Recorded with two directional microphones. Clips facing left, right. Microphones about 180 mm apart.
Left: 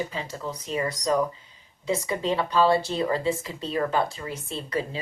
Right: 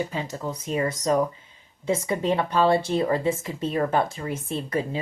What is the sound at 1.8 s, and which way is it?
A woman's voice, 50° right (ahead or behind).